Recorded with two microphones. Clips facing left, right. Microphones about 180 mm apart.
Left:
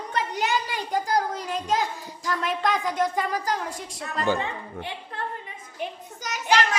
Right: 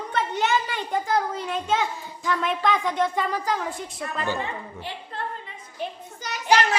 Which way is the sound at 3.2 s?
45° left (ahead or behind).